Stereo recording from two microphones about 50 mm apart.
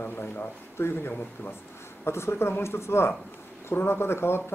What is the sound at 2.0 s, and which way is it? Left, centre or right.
Speech, left.